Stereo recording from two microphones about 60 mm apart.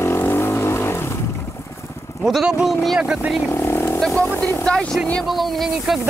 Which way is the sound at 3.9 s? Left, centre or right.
Centre.